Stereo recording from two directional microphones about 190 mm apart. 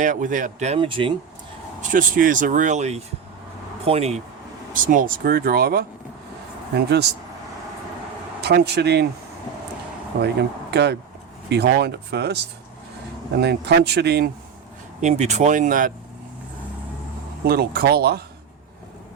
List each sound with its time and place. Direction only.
0.0 s speech: 40° right (ahead or behind); by 1.1 s 25° right (ahead or behind)
1.8 s speech: 45° right (ahead or behind)
4.7 s speech: 45° right (ahead or behind)
8.4 s speech: 60° right (ahead or behind)
10.1 s speech: 55° right (ahead or behind)
13.4 s speech: 60° right (ahead or behind)
15.0 s speech: 35° right (ahead or behind)
17.4 s speech: 55° right (ahead or behind)